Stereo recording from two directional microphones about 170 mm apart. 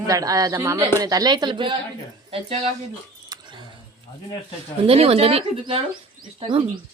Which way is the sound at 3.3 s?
25° right (ahead or behind).